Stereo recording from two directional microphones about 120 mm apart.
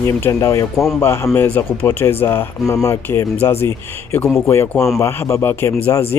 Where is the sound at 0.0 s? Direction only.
25° left (ahead or behind).